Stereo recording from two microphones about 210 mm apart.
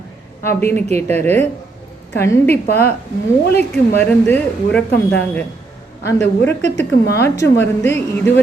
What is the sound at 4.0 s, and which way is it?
A woman's voice, 10° left (ahead or behind).